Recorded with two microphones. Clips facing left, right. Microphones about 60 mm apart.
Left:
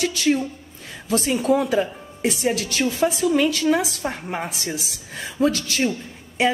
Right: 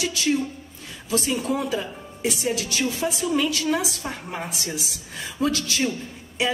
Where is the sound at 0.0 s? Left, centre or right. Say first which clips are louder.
Left 3 dB; left.